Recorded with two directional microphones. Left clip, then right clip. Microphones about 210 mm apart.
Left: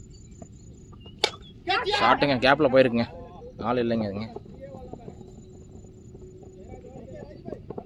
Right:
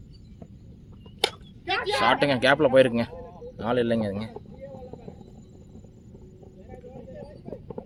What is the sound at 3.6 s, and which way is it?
Speech, 15° right (ahead or behind).